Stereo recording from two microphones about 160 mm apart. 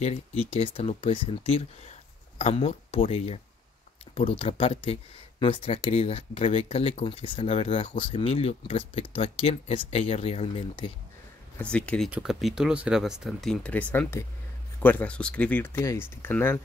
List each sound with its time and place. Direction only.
0.0 s speech: 40° left (ahead or behind)
11.5 s speech: 10° left (ahead or behind)
12.1 s speech: 5° right (ahead or behind); by 16.5 s 10° left (ahead or behind)